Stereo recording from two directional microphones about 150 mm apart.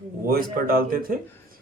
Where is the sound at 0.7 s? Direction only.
75° right (ahead or behind).